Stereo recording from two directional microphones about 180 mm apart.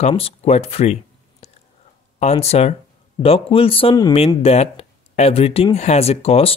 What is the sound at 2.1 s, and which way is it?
Speech, 35° left (ahead or behind).